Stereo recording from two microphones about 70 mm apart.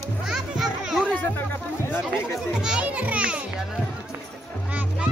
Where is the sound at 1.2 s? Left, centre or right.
Left.